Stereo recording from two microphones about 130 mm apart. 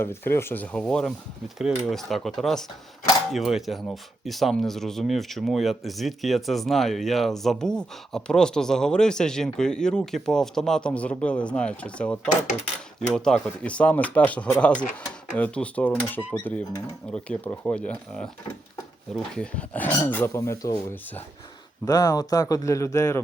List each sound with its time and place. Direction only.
0.0 s speech: 20° left (ahead or behind)